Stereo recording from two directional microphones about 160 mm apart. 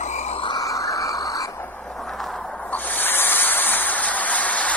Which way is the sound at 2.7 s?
10° left (ahead or behind).